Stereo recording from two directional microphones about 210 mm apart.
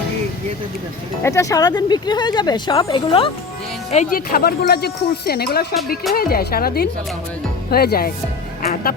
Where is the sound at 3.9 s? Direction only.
35° left (ahead or behind).